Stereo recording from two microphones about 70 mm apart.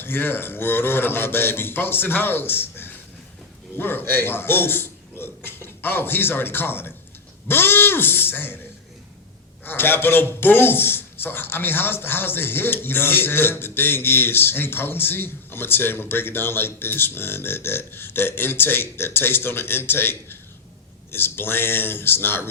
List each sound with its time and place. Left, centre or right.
0.0 s a man's voice: left
9.6 s speech: left